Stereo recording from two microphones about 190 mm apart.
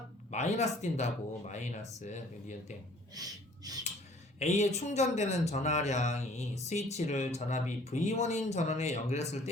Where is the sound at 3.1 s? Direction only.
20° right (ahead or behind).